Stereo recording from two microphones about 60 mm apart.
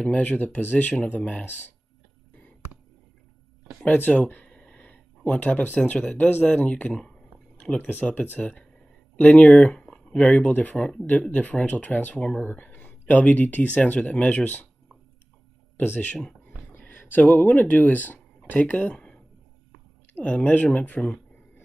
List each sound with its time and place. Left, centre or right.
0.1 s speech: left
3.8 s a sound: left
5.8 s speech: centre
6.9 s speech: centre
7.7 s speech: left
9.7 s speech: centre; by 12.2 s left
12.4 s a sound: left
13.1 s speech: left
15.8 s speech: left
16.7 s speech: left